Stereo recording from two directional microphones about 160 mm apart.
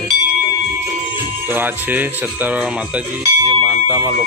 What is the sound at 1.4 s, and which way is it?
Speech, 10° right (ahead or behind).